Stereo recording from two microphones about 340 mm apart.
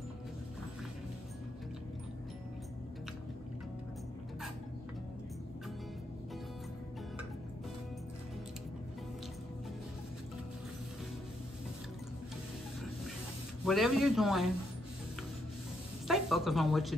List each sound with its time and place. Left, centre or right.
13.7 s a man's voice: centre
16.1 s music: centre